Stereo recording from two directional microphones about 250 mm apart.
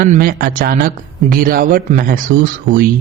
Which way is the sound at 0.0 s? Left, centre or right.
Right.